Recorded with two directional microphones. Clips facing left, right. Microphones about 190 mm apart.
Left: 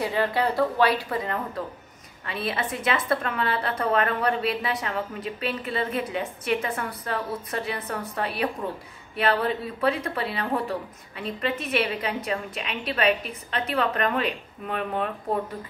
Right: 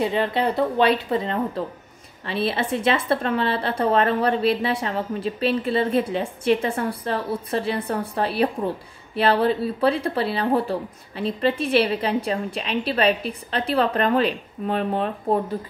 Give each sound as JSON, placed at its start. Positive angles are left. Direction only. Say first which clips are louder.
{"t": 0.0, "sound": "a woman's voice", "louder": "right 3 dB", "side_deg": -20}